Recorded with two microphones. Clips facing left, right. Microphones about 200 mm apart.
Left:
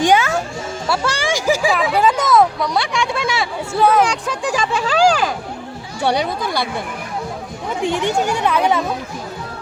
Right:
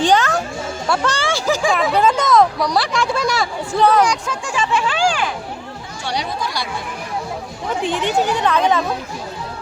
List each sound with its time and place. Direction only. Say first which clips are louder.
0.0 s speech: left 1 dB; 10° left (ahead or behind)
4.4 s speech: even; 40° left (ahead or behind)
6.0 s speech: left 6 dB; 55° left (ahead or behind)
7.8 s speech: left 1 dB; 15° left (ahead or behind)